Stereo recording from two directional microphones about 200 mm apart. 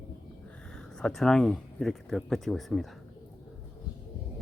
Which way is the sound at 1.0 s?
Centre (ahead or behind).